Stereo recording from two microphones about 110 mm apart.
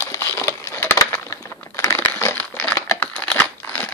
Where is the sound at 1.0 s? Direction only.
30° left (ahead or behind).